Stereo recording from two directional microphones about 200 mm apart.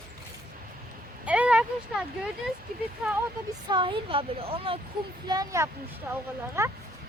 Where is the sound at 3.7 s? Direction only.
25° right (ahead or behind).